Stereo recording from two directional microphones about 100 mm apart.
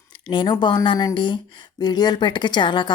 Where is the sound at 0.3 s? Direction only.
55° left (ahead or behind).